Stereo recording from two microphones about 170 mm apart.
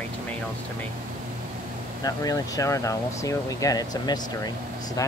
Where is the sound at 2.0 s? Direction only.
20° left (ahead or behind).